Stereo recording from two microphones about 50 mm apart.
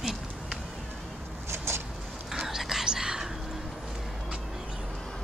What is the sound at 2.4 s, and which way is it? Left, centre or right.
Whispering, centre.